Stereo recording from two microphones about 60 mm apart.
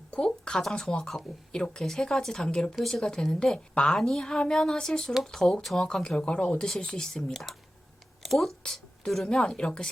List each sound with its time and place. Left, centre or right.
0.1 s speech: centre